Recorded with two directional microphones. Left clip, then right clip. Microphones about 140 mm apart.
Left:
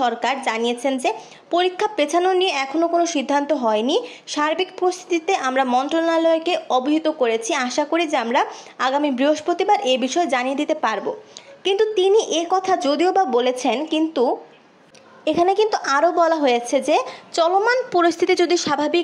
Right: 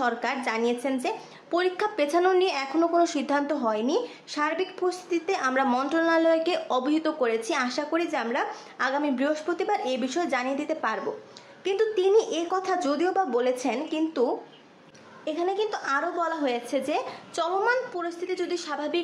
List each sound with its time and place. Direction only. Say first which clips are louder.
0.0 s a woman's voice: left 7 dB; 20° left (ahead or behind)
15.2 s a woman's voice: left 10 dB; 45° left (ahead or behind)
17.9 s a woman's voice: left 14 dB; 65° left (ahead or behind); by 18.9 s 45° left (ahead or behind)